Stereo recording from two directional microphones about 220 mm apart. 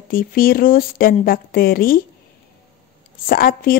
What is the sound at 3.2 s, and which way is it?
Speech, 40° left (ahead or behind).